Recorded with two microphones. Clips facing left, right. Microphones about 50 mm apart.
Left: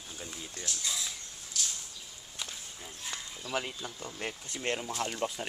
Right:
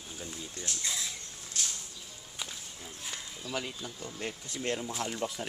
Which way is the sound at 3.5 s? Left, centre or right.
Left.